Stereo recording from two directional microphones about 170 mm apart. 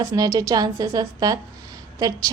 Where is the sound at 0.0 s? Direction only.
20° right (ahead or behind).